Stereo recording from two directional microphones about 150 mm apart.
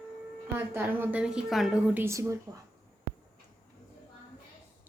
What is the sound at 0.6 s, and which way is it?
A woman's voice, 15° right (ahead or behind).